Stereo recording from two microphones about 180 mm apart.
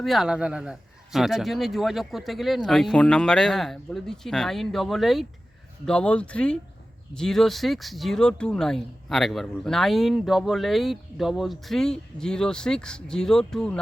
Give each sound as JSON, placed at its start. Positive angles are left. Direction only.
{"t": 0.0, "sound": "speech", "side_deg": 0}